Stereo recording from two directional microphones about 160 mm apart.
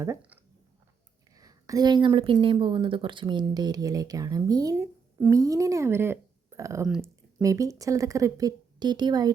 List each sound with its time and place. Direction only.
0.0 s speech: 15° right (ahead or behind)
1.4 s a woman's voice: 20° right (ahead or behind)